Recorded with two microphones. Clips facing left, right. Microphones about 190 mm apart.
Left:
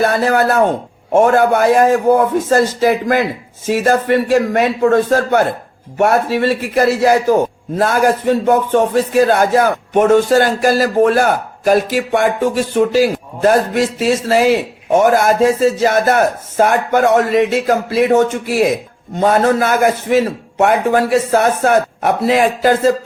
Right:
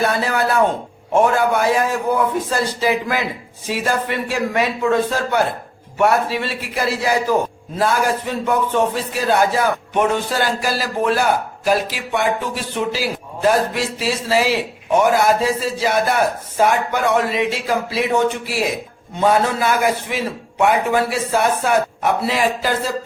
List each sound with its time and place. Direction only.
0.0 s speech: 50° left (ahead or behind)